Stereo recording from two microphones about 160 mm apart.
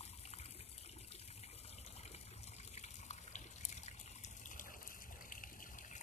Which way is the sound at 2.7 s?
45° left (ahead or behind).